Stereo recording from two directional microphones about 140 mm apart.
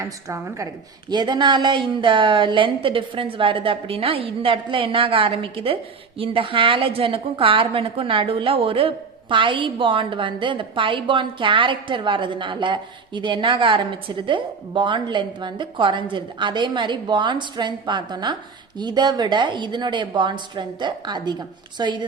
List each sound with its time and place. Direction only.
0.0 s a woman's voice: 20° right (ahead or behind)